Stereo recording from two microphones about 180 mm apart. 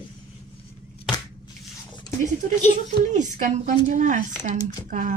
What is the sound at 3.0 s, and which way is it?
Speech, 40° right (ahead or behind).